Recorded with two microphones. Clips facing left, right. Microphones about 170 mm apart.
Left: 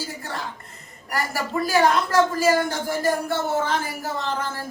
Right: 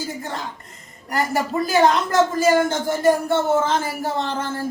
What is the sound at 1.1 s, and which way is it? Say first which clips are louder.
A woman's voice: right 4 dB; 20° right (ahead or behind).